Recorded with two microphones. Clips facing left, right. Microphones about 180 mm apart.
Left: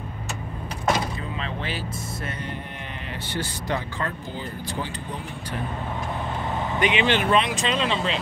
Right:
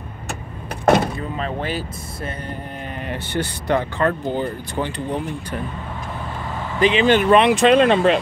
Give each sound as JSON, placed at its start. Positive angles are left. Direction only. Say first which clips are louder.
{"t": 0.8, "sound": "door", "louder": "right 8 dB", "side_deg": -55}
{"t": 3.1, "sound": "speech", "louder": "right 6 dB", "side_deg": -60}
{"t": 6.8, "sound": "speech", "louder": "right 7 dB", "side_deg": -30}
{"t": 7.1, "sound": "speech", "louder": "right 8 dB", "side_deg": -50}